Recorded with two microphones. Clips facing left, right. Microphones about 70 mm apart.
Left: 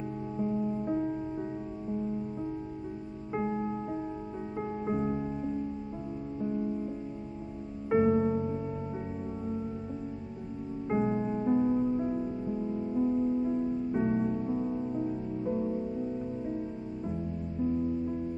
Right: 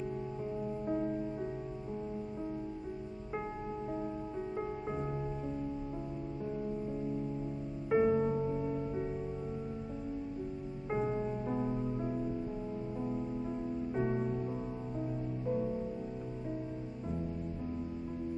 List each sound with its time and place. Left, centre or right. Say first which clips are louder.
0.6 s music: left 2 dB; centre
3.3 s music: left 8 dB; centre
7.9 s music: left 3 dB; centre
10.9 s music: left 5 dB; centre